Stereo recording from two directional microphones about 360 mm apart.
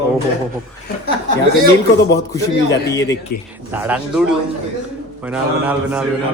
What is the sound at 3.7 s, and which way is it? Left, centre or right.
A man's voice, centre.